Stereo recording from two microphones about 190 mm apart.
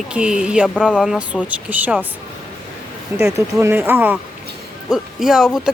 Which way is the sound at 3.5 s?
10° right (ahead or behind).